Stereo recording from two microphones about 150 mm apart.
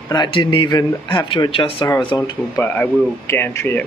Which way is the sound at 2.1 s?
25° left (ahead or behind).